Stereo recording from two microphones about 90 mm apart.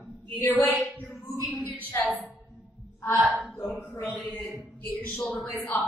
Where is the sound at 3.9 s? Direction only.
20° left (ahead or behind).